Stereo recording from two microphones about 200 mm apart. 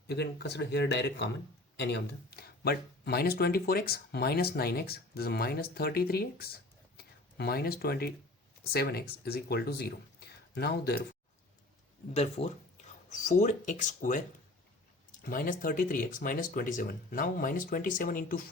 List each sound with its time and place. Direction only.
0.1 s speech: 55° left (ahead or behind)
12.1 s speech: 30° left (ahead or behind)
15.2 s speech: 45° left (ahead or behind)